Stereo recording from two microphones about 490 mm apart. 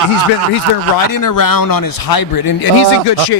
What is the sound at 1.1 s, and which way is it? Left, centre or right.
Speech, left.